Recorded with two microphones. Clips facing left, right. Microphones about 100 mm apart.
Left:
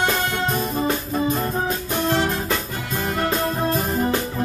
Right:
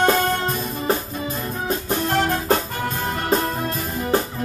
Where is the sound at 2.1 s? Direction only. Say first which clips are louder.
Right 6 dB; 50° right (ahead or behind).